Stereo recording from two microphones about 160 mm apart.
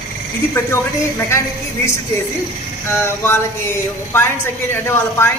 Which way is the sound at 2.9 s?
15° left (ahead or behind).